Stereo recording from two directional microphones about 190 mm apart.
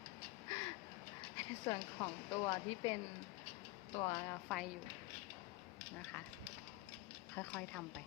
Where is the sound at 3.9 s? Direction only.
25° left (ahead or behind).